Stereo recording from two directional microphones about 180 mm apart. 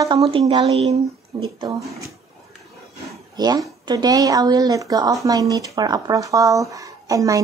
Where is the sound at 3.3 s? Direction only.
20° right (ahead or behind).